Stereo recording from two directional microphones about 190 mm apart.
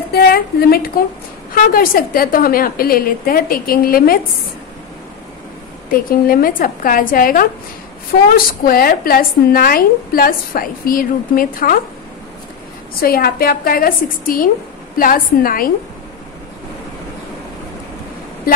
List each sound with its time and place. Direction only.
0.1 s a woman's voice: 55° left (ahead or behind)
6.0 s a woman's voice: 50° left (ahead or behind)
8.6 s a woman's voice: 50° left (ahead or behind)
13.0 s a woman's voice: 50° left (ahead or behind)